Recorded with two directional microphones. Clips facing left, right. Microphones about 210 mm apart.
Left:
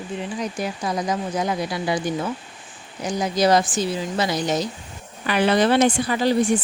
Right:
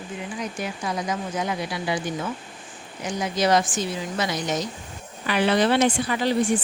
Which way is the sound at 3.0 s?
35° left (ahead or behind).